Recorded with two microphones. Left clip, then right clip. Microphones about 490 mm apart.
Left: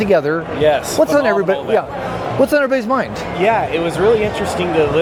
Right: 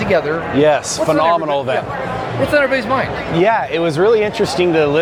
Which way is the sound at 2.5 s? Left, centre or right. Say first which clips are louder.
Right 1 dB; left.